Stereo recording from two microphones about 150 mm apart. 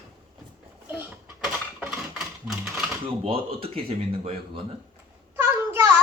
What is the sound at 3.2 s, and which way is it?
Speech, 40° right (ahead or behind).